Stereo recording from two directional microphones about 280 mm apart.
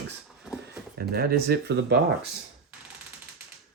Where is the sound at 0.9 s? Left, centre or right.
Right.